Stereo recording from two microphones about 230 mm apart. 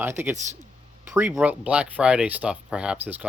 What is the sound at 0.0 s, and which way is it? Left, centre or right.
Speech, centre.